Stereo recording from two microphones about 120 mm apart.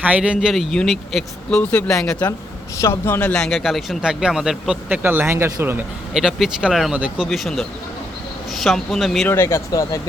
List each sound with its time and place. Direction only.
0.0 s speech: 10° right (ahead or behind); by 2.3 s 5° left (ahead or behind)
2.7 s speech: 25° left (ahead or behind); by 4.8 s 5° right (ahead or behind)
4.9 s speech: 15° right (ahead or behind)
6.1 s speech: 5° right (ahead or behind)
9.2 s speech: 20° left (ahead or behind)